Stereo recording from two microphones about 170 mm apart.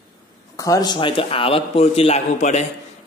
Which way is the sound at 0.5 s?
20° left (ahead or behind).